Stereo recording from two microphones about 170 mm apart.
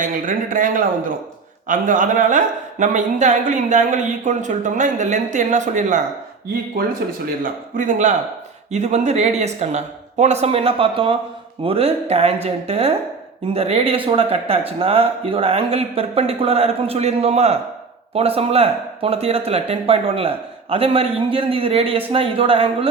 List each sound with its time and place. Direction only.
0.0 s a woman's voice: 55° right (ahead or behind)
7.4 s a woman's voice: 50° right (ahead or behind); by 22.9 s 35° right (ahead or behind)